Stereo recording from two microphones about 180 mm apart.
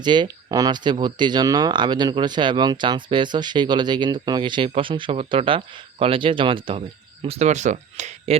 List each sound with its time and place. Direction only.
0.0 s speech: 25° right (ahead or behind); by 8.4 s 40° right (ahead or behind)